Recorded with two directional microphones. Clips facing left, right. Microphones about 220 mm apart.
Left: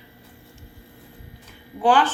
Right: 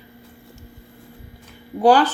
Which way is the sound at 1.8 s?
40° right (ahead or behind).